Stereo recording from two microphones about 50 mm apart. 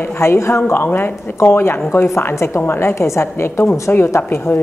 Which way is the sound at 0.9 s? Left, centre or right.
Left.